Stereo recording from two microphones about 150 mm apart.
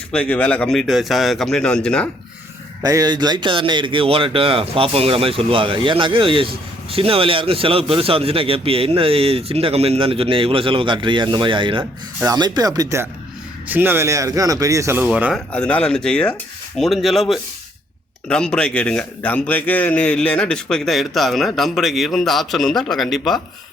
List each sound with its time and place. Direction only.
0.1 s a man's voice: 10° left (ahead or behind)
2.8 s a man's voice: 25° right (ahead or behind)
15.5 s a man's voice: 10° left (ahead or behind)